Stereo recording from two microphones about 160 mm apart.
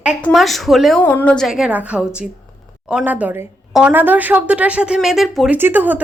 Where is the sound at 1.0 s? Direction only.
10° left (ahead or behind).